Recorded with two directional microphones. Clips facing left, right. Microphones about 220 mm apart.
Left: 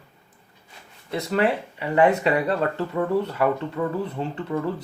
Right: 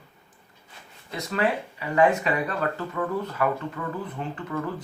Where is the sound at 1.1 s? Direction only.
30° left (ahead or behind).